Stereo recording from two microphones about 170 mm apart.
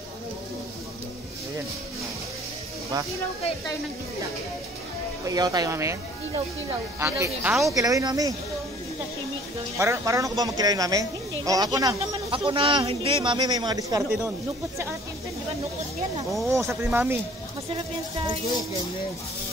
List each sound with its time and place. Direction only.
5.2 s speech: 20° right (ahead or behind)
7.0 s speech: 15° right (ahead or behind)
9.8 s speech: 15° right (ahead or behind)
16.4 s speech: 15° right (ahead or behind)